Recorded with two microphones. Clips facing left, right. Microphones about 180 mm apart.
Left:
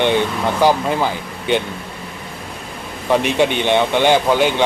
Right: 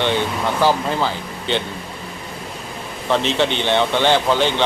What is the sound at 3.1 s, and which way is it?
Speech, 10° left (ahead or behind).